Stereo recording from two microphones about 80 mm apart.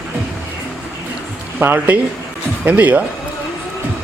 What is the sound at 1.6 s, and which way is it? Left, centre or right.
Speech, right.